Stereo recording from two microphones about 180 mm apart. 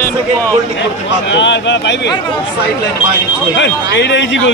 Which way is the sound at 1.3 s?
80° left.